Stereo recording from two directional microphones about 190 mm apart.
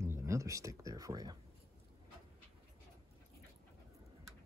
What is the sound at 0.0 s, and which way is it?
Speech, 15° right (ahead or behind).